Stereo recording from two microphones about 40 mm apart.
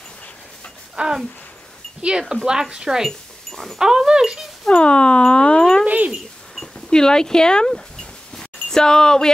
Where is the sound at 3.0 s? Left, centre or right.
Centre.